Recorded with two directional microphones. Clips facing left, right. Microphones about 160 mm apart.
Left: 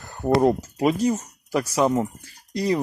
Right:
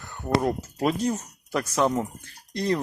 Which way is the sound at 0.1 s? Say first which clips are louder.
Left 6 dB; 35° left (ahead or behind).